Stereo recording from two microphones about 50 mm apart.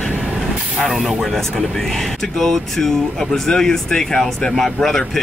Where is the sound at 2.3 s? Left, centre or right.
Centre.